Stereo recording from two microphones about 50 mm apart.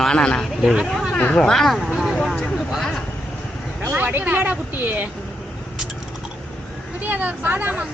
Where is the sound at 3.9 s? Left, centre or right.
Right.